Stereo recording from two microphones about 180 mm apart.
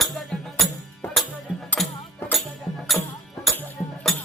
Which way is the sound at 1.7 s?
5° left (ahead or behind).